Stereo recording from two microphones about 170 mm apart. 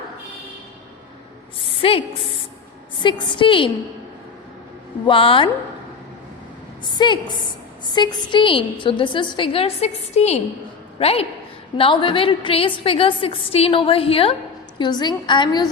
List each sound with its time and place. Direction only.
1.5 s a woman's voice: 30° left (ahead or behind)
5.0 s a woman's voice: 30° left (ahead or behind)
6.8 s a woman's voice: 25° left (ahead or behind)